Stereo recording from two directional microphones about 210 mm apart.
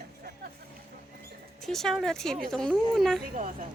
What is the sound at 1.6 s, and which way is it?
A woman's voice, centre (ahead or behind).